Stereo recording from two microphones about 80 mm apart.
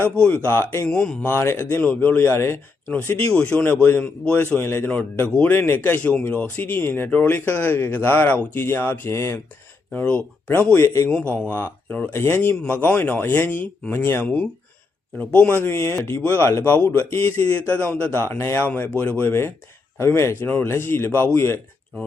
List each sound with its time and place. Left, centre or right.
0.2 s speech: centre
0.9 s a man's voice: centre
1.2 s a man's voice: left
9.9 s speech: left
11.1 s a man's voice: centre; by 17.4 s left
17.7 s speech: centre; by 18.6 s left
18.6 s speech: left
19.3 s speech: left